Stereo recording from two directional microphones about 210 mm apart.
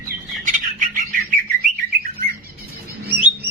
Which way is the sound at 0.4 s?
40° right (ahead or behind).